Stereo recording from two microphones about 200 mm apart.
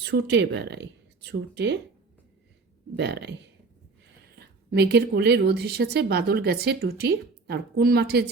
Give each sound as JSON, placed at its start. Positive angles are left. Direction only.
{"t": 0.0, "sound": "speech", "side_deg": -60}
{"t": 2.9, "sound": "speech", "side_deg": -55}
{"t": 4.4, "sound": "a woman's voice", "side_deg": -55}